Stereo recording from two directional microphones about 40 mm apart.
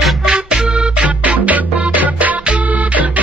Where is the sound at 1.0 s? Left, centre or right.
Right.